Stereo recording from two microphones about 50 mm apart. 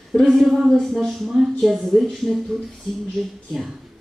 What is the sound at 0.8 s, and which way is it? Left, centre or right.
Speech, centre.